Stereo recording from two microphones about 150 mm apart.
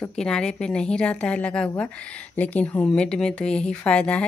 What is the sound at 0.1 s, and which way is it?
A woman's voice, 5° left (ahead or behind).